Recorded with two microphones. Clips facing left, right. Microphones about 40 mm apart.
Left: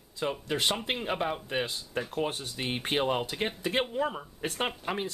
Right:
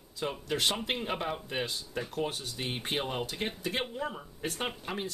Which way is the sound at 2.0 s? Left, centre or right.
Left.